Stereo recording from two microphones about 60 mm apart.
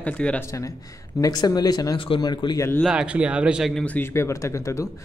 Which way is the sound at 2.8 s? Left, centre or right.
Centre.